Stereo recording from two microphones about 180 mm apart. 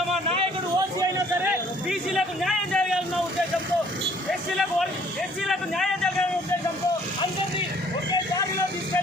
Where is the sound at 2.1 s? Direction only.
Centre (ahead or behind).